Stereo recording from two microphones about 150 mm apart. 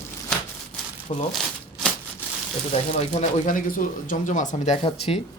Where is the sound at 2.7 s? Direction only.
45° left (ahead or behind).